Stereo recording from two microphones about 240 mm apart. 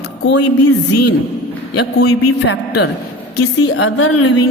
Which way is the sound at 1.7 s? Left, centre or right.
Left.